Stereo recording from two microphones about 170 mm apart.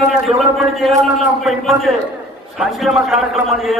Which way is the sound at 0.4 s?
Centre (ahead or behind).